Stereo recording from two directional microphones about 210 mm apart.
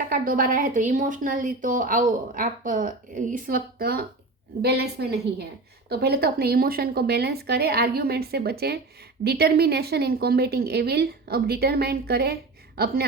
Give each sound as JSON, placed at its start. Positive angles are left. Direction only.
{"t": 0.1, "sound": "speech", "side_deg": -40}